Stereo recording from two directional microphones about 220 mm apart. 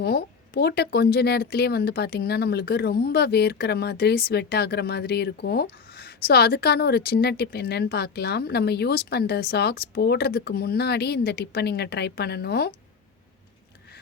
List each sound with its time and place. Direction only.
0.0 s speech: 45° left (ahead or behind)